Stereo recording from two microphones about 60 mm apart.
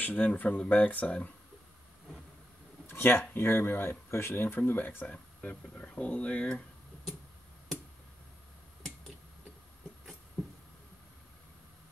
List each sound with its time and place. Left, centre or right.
0.0 s speech: left
2.9 s speech: left